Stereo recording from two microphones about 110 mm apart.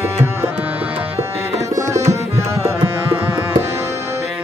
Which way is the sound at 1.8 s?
25° right (ahead or behind).